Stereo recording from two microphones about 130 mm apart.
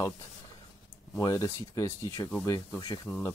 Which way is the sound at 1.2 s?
25° left (ahead or behind).